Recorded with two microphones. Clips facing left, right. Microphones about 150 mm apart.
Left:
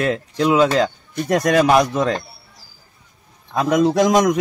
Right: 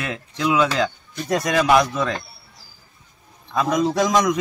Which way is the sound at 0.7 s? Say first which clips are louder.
Left 4 dB; 50° left (ahead or behind).